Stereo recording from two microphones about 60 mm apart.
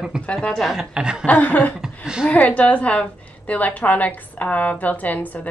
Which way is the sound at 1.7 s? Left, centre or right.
Centre.